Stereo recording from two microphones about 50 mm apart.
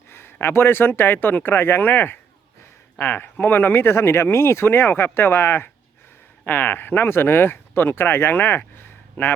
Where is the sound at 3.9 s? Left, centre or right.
Left.